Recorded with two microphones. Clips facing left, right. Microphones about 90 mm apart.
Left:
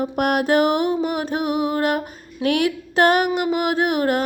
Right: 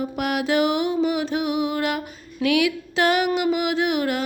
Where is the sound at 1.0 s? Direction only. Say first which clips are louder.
Even; 50° left (ahead or behind).